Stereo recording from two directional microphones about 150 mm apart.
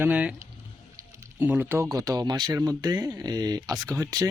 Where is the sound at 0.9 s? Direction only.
15° right (ahead or behind).